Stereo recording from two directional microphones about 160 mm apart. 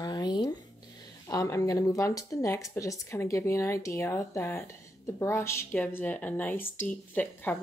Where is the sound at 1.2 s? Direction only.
20° left (ahead or behind).